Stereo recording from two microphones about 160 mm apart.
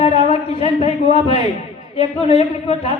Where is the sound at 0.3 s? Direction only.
40° left (ahead or behind).